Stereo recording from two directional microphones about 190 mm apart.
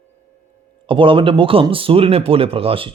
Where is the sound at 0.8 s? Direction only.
25° right (ahead or behind).